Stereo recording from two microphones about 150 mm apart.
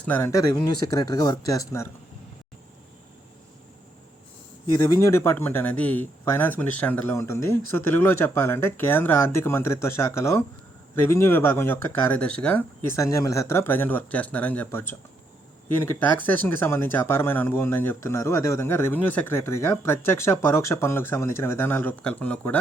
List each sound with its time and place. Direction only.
0.0 s speech: 15° left (ahead or behind)
4.7 s speech: 20° left (ahead or behind)
13.0 s speech: 20° left (ahead or behind)